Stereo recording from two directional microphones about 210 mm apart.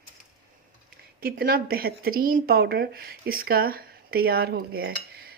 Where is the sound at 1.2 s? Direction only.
45° right (ahead or behind).